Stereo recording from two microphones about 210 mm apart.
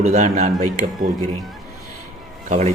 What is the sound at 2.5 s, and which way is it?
Speech, 35° right (ahead or behind).